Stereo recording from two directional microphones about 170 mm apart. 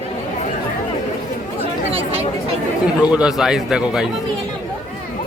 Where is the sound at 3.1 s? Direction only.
5° right (ahead or behind).